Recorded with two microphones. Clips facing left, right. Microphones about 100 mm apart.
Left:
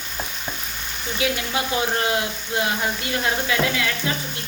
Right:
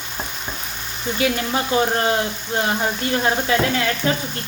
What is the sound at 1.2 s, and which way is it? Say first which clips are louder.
Speech: right 3 dB; 40° right (ahead or behind).